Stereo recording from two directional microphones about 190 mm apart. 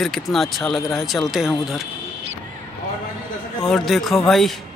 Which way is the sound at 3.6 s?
Centre (ahead or behind).